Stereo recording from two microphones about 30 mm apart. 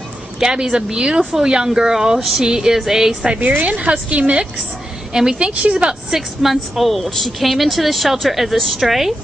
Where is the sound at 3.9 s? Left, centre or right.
Right.